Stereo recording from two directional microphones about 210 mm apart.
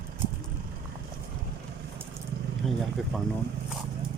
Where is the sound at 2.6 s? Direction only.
Centre (ahead or behind).